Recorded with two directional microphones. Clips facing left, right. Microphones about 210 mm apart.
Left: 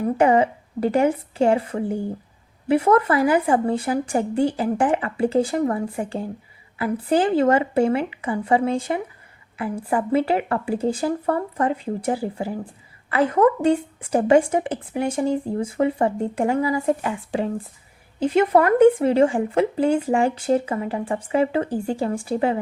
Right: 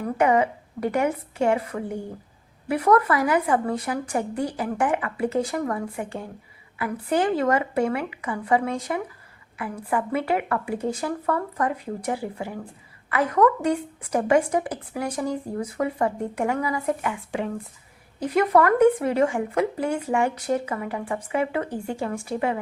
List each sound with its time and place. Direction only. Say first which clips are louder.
0.0 s a woman's voice: left 3 dB; 30° left (ahead or behind)